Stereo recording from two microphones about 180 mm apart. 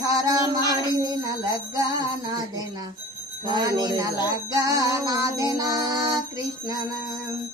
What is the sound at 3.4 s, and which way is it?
Music, 25° right (ahead or behind).